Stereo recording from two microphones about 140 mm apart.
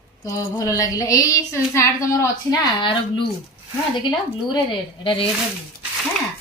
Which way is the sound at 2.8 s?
35° left (ahead or behind).